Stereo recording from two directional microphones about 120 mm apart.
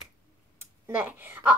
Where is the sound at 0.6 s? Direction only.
15° right (ahead or behind).